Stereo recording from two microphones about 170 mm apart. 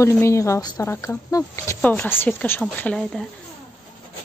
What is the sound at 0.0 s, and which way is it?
Speech, 15° left (ahead or behind).